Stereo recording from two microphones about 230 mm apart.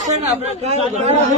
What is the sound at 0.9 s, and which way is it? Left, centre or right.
Speech, right.